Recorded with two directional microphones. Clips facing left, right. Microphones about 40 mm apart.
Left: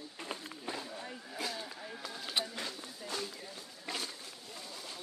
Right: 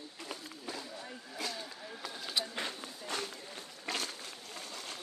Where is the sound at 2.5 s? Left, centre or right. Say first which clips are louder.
Right 2 dB; right.